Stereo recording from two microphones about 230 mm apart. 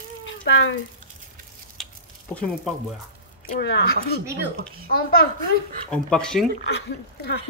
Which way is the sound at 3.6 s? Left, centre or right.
Left.